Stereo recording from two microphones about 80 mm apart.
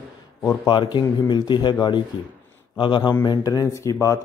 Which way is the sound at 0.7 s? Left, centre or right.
Left.